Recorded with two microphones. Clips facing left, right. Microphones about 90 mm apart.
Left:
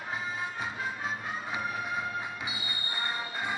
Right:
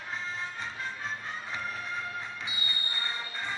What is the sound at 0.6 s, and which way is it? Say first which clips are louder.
Music: left 3 dB; 10° left (ahead or behind).